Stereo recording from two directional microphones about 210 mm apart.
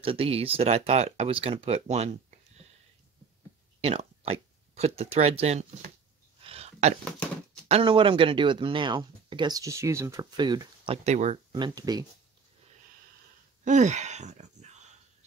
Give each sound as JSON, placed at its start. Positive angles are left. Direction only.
{"t": 0.0, "sound": "speech", "side_deg": -25}
{"t": 3.8, "sound": "speech", "side_deg": -30}
{"t": 6.4, "sound": "a sound", "side_deg": -30}
{"t": 7.6, "sound": "speech", "side_deg": -25}
{"t": 11.1, "sound": "speech", "side_deg": -30}
{"t": 11.5, "sound": "speech", "side_deg": -20}
{"t": 13.7, "sound": "a sound", "side_deg": -35}